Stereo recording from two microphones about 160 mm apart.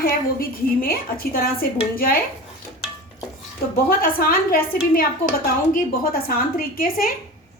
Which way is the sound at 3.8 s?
65° left (ahead or behind).